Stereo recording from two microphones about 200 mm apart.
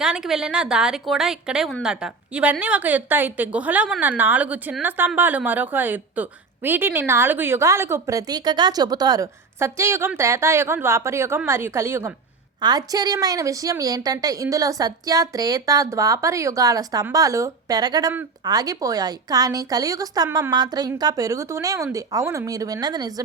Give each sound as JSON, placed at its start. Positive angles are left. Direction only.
{"t": 0.0, "sound": "a woman's voice", "side_deg": -5}